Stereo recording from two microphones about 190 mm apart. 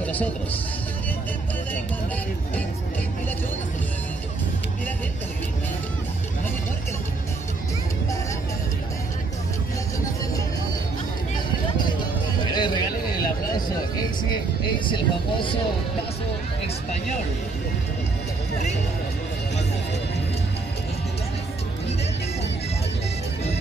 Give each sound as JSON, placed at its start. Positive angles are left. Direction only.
{"t": 0.0, "sound": "a man's voice", "side_deg": 10}
{"t": 12.5, "sound": "a sound", "side_deg": 25}
{"t": 14.9, "sound": "speech", "side_deg": 25}